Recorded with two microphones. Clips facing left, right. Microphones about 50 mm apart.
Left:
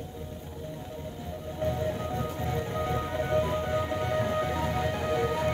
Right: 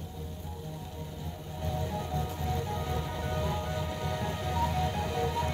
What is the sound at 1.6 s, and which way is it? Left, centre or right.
Music, left.